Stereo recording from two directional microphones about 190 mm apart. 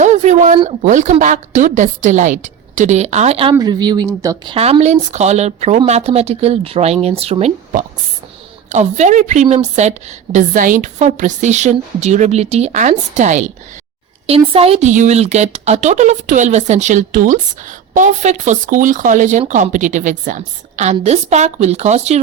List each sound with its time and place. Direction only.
0.0 s a sound: 40° right (ahead or behind)
0.6 s a woman's voice: 40° right (ahead or behind)
3.5 s a woman's voice: 20° right (ahead or behind)
4.5 s a woman's voice: 30° right (ahead or behind)